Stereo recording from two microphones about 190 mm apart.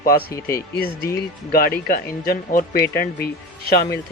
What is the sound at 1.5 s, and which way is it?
Speech, 50° left (ahead or behind).